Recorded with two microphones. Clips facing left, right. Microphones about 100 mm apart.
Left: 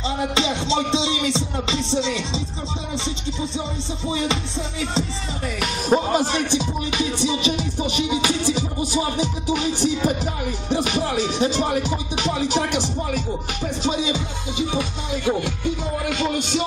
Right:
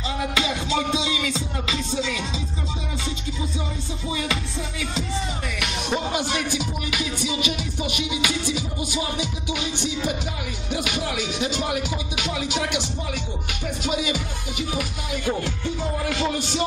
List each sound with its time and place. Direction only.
0.3 s music: 25° left (ahead or behind)
4.1 s music: 25° left (ahead or behind)